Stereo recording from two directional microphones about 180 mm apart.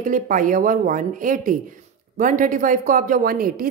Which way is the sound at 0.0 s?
45° right (ahead or behind).